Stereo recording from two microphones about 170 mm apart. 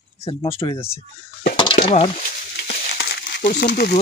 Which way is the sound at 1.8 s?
60° left (ahead or behind).